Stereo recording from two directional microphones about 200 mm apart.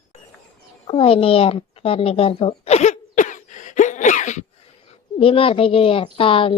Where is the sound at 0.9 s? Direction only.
25° left (ahead or behind).